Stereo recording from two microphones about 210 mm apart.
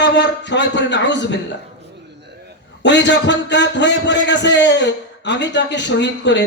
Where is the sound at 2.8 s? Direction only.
55° left (ahead or behind).